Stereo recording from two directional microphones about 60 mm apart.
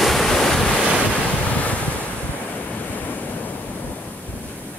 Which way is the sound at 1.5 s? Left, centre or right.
Left.